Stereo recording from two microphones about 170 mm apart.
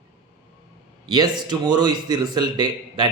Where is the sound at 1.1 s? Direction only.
25° right (ahead or behind).